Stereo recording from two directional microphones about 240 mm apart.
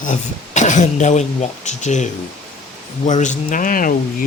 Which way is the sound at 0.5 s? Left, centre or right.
Left.